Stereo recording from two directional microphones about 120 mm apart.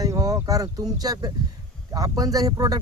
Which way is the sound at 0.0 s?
30° right (ahead or behind).